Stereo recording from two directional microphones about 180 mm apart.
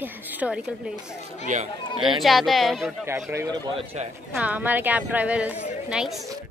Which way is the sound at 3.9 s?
35° right (ahead or behind).